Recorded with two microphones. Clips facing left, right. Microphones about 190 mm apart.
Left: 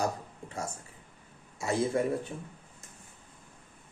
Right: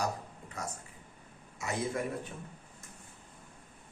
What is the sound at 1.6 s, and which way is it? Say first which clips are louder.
Speech: left 6 dB; 30° left (ahead or behind).